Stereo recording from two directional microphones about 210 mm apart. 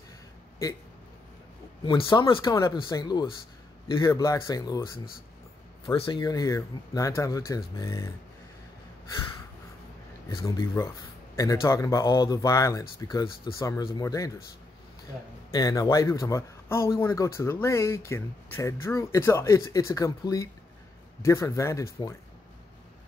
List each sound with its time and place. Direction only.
1.9 s speech: 20° left (ahead or behind)
5.9 s speech: 25° left (ahead or behind)
10.3 s speech: 15° left (ahead or behind)
15.5 s speech: 15° left (ahead or behind)